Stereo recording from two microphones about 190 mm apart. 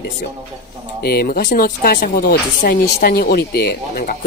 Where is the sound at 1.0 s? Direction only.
55° left (ahead or behind).